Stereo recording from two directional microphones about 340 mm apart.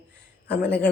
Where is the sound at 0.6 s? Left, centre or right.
Centre.